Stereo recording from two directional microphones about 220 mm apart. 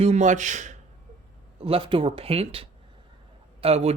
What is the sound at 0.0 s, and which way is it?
Speech, 30° right (ahead or behind).